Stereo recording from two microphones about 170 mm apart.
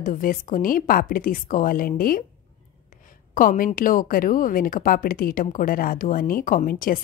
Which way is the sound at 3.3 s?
50° left (ahead or behind).